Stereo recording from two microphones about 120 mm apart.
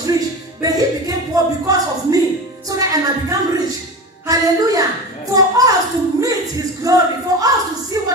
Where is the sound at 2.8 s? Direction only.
30° right (ahead or behind).